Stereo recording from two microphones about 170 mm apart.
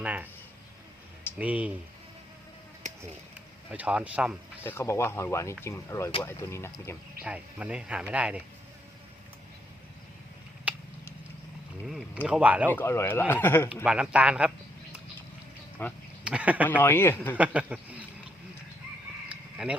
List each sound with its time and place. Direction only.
0.0 s speech: 10° right (ahead or behind)
1.4 s speech: 10° right (ahead or behind)
3.7 s speech: 5° right (ahead or behind)
4.6 s speech: 15° left (ahead or behind)
7.2 s speech: 5° right (ahead or behind)
10.7 s a sound: 10° right (ahead or behind)
11.9 s speech: 5° right (ahead or behind)
12.7 s speech: 15° left (ahead or behind)
13.8 s speech: 5° right (ahead or behind)
15.8 s speech: 10° left (ahead or behind)
16.2 s speech: 5° right (ahead or behind)
16.6 s speech: 10° left (ahead or behind)
17.3 s speech: 10° right (ahead or behind)
19.3 s a sound: 5° right (ahead or behind)